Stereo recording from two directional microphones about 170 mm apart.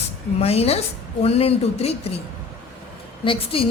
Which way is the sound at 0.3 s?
35° left (ahead or behind).